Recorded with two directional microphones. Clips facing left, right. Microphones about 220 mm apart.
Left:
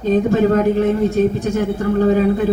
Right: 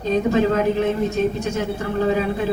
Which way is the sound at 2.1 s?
45° left (ahead or behind).